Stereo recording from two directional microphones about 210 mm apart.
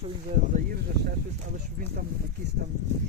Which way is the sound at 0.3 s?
35° right (ahead or behind).